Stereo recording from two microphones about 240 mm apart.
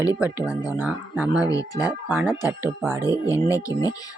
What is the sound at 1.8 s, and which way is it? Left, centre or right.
Speech, centre.